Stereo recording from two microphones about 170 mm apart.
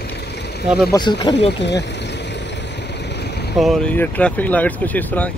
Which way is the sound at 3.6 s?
Centre (ahead or behind).